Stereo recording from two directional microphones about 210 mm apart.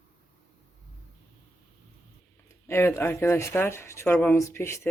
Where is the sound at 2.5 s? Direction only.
10° left (ahead or behind).